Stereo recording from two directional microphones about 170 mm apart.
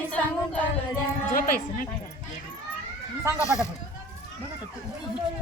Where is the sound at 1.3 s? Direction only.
55° left (ahead or behind).